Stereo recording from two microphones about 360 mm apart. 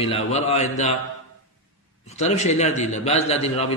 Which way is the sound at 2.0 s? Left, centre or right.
Centre.